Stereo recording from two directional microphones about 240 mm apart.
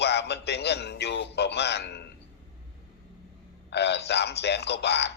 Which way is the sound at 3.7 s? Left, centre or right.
Left.